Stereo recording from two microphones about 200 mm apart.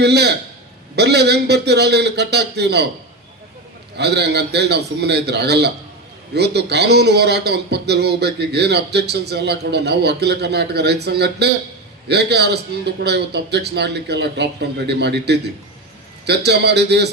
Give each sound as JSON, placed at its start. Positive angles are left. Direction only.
{"t": 0.0, "sound": "speech", "side_deg": -55}
{"t": 3.9, "sound": "speech", "side_deg": -55}